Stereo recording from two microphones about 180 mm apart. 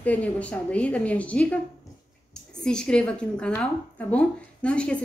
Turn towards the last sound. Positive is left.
turn(degrees=5)  # may be behind; listen again after turning